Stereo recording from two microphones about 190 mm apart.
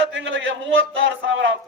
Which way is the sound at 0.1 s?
80° right.